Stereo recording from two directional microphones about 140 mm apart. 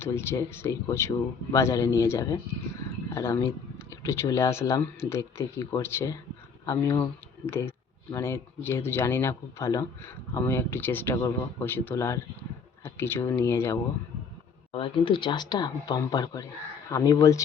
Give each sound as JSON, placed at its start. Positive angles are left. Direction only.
{"t": 0.0, "sound": "speech", "side_deg": 15}
{"t": 14.7, "sound": "speech", "side_deg": 40}